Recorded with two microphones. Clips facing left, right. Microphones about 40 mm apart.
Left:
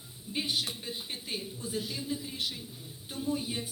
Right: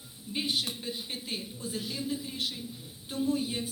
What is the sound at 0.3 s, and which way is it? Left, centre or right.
Speech, centre.